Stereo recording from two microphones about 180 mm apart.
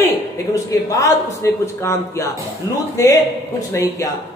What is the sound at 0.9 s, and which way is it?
A man's voice, 15° left (ahead or behind).